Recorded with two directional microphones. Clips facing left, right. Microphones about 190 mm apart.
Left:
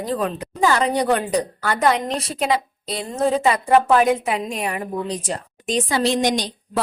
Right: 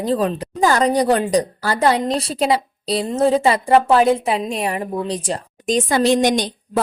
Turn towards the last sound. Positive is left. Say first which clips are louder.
# right 3 dB
turn(degrees=-50)  # may be behind; listen again after turning